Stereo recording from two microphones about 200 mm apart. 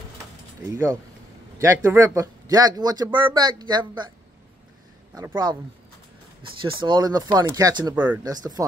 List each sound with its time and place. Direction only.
0.7 s speech: 15° right (ahead or behind)
5.1 s speech: 20° right (ahead or behind)
6.6 s speech: 25° right (ahead or behind); by 8.3 s 10° right (ahead or behind)
8.3 s speech: 20° right (ahead or behind)